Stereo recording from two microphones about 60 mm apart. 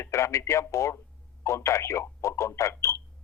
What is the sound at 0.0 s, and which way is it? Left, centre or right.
Speech, left.